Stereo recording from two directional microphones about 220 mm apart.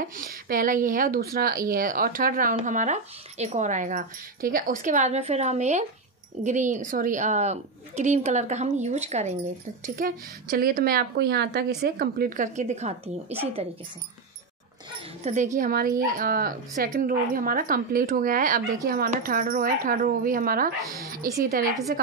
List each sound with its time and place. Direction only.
0.0 s speech: 40° right (ahead or behind)
15.2 s a woman's voice: 35° right (ahead or behind)